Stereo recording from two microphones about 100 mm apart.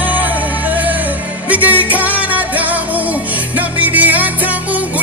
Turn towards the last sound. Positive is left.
turn(degrees=-15)  # may be behind; listen again after turning